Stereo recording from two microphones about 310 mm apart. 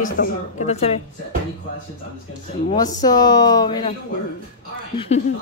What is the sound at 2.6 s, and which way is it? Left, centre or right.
Speech, centre.